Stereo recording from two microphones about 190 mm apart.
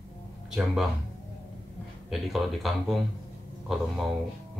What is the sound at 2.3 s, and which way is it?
Speech, centre (ahead or behind).